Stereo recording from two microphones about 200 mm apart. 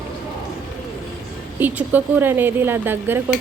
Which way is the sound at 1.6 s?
10° right (ahead or behind).